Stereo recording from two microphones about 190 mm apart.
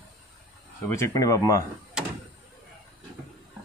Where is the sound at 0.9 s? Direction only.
15° left (ahead or behind).